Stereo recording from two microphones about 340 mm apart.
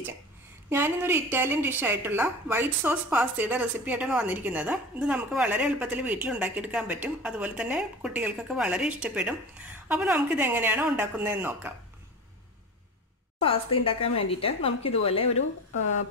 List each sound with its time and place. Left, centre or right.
0.7 s a woman's voice: centre
13.4 s a woman's voice: centre